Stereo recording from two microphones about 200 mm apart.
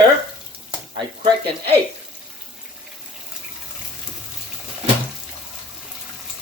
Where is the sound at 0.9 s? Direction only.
25° right (ahead or behind).